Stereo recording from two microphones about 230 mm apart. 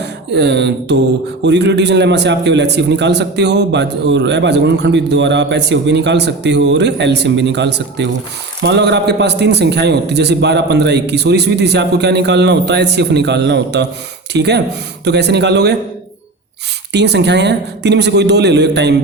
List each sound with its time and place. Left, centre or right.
0.0 s a man's voice: right
16.9 s a man's voice: right